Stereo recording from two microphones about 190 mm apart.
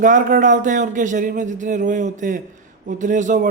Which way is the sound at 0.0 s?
45° right (ahead or behind).